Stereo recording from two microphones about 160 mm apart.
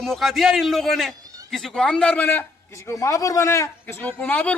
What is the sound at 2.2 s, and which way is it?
A man's voice, 15° left (ahead or behind).